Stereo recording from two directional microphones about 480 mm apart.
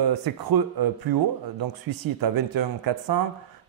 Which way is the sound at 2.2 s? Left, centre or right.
Right.